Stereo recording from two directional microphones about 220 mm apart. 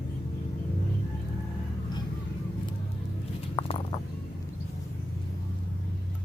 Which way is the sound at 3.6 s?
20° left (ahead or behind).